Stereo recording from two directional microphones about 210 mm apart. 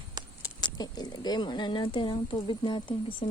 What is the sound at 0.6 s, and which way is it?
Speech, 20° left (ahead or behind).